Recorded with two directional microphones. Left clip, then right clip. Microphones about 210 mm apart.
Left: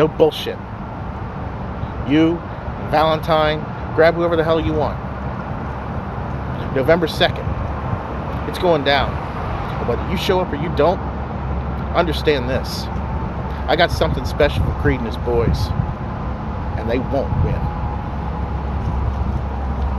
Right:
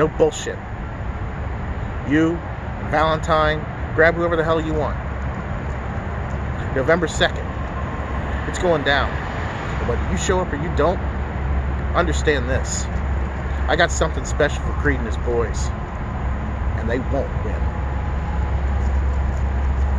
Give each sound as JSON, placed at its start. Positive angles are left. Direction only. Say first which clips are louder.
{"t": 0.0, "sound": "speech", "louder": "left 3 dB", "side_deg": 20}
{"t": 2.0, "sound": "speech", "louder": "left 3 dB", "side_deg": 15}
{"t": 6.9, "sound": "speech", "louder": "left 3 dB", "side_deg": 20}
{"t": 8.5, "sound": "speech", "louder": "left 2 dB", "side_deg": 20}
{"t": 10.1, "sound": "speech", "louder": "left 3 dB", "side_deg": 20}
{"t": 13.7, "sound": "speech", "louder": "left 2 dB", "side_deg": 20}